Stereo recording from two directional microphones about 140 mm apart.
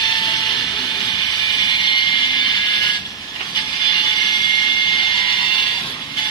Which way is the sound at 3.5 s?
35° left (ahead or behind).